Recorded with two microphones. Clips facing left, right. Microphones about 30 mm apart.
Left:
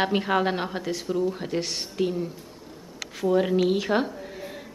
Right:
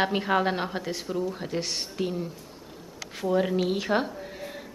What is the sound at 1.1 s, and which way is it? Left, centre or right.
A woman's voice, centre.